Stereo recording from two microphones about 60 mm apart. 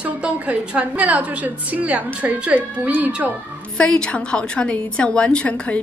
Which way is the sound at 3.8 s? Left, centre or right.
Centre.